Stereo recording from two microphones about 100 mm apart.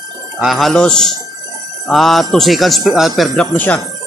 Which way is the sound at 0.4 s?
Centre (ahead or behind).